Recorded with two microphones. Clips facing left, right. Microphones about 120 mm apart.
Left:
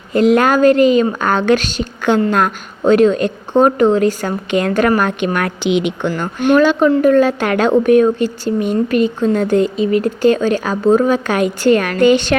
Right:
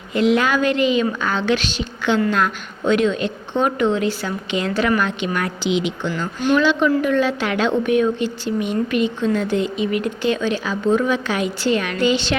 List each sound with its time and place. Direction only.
0.1 s a woman's voice: 45° left (ahead or behind)
6.8 s a woman's voice: 35° left (ahead or behind)